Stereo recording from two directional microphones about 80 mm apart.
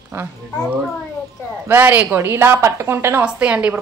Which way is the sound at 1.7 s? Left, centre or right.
Right.